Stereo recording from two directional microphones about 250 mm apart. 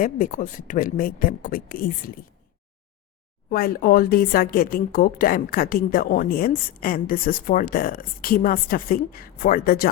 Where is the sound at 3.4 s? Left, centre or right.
Left.